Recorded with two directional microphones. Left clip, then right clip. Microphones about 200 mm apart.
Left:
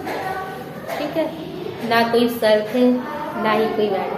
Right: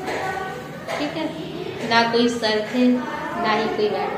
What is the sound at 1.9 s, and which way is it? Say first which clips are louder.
Speech: left 1 dB; 20° left (ahead or behind).